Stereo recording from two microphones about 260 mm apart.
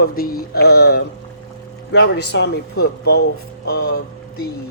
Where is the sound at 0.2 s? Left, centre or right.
Left.